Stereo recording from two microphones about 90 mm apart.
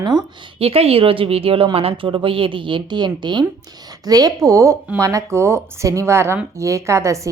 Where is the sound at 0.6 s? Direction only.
90° right; by 3.4 s 60° right (ahead or behind).